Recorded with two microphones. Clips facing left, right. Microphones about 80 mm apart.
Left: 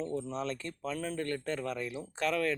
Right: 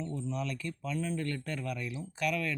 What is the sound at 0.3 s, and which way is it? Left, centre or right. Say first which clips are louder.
Speech: even; left.